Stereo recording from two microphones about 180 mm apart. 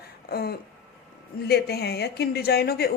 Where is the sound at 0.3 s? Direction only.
60° left (ahead or behind).